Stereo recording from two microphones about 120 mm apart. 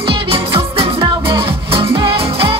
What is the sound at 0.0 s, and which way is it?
Music, 45° right (ahead or behind).